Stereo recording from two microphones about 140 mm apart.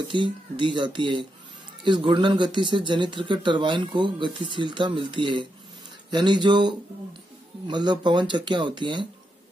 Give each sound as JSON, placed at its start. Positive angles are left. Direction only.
{"t": 0.1, "sound": "speech", "side_deg": -35}